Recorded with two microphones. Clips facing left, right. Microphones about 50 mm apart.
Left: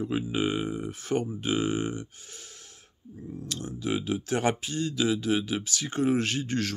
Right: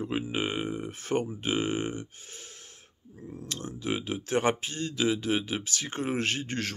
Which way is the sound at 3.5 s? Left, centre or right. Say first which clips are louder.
Left 2 dB; right.